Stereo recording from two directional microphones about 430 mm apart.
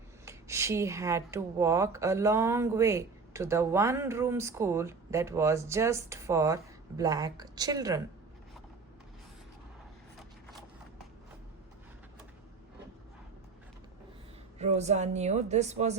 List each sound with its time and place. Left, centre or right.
0.3 s speech: centre
14.6 s speech: centre